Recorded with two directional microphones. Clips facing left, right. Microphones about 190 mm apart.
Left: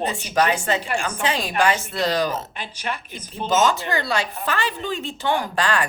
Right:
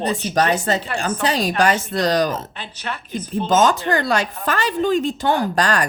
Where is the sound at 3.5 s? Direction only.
50° right (ahead or behind).